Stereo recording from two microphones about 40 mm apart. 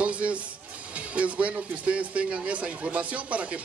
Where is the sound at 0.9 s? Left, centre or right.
Right.